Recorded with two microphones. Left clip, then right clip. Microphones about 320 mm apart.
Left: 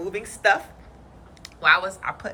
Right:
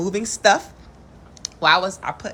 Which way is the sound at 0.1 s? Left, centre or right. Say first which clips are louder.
Right 3 dB; centre.